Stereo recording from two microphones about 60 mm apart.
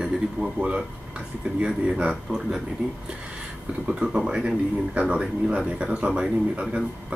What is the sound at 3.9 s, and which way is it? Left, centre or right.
Speech, centre.